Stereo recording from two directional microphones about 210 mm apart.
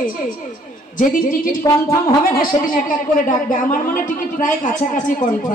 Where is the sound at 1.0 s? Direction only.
40° left (ahead or behind).